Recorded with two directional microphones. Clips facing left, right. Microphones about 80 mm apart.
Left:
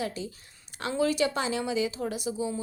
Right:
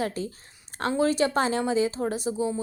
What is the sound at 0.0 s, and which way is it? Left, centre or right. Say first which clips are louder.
A woman's voice: right 4 dB; right.